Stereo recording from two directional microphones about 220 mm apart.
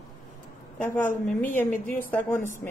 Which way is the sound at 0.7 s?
10° left (ahead or behind).